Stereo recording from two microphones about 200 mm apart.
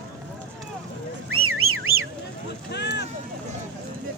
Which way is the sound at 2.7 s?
60° left (ahead or behind).